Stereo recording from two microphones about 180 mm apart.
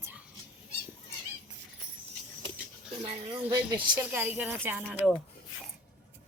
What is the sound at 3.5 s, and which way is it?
Speech, 10° right (ahead or behind).